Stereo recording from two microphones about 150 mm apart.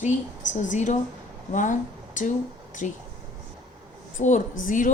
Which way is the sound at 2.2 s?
60° left (ahead or behind).